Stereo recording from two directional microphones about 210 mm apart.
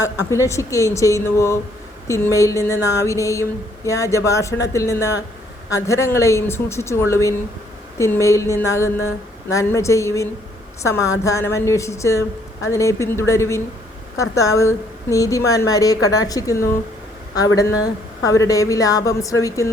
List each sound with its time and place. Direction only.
0.0 s a woman's voice: 15° left (ahead or behind)